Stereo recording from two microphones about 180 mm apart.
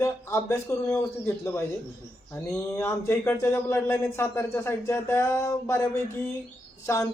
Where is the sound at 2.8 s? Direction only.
15° left (ahead or behind).